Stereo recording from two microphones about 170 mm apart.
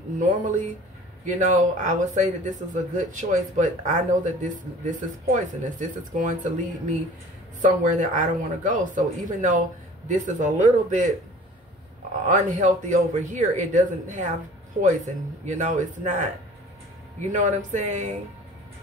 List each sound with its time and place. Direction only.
0.2 s speech: 45° right (ahead or behind)
12.3 s speech: 50° right (ahead or behind)
15.4 s speech: 45° right (ahead or behind)
17.3 s speech: 50° right (ahead or behind)